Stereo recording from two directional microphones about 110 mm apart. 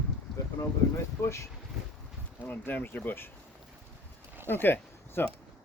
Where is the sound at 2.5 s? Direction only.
15° left (ahead or behind).